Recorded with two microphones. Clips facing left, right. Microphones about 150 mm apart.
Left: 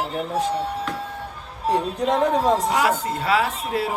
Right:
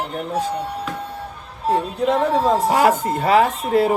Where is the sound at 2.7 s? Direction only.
50° right (ahead or behind).